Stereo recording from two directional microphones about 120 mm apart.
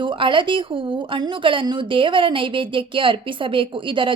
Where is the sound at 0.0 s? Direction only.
45° right (ahead or behind).